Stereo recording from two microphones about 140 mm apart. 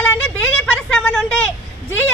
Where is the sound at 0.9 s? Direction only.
5° left (ahead or behind).